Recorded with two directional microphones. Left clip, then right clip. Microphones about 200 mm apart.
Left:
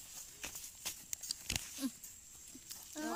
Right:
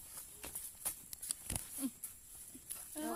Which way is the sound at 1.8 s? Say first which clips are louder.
Left 1 dB; 15° left (ahead or behind).